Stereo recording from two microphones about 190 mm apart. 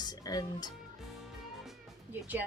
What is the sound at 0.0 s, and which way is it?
Speech, 20° left (ahead or behind).